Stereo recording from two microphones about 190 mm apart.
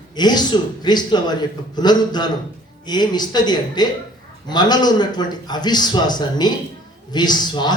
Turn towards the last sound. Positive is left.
turn(degrees=20)  # may be behind; listen again after turning